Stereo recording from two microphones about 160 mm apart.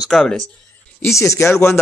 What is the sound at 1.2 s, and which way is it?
Speech, 15° left (ahead or behind).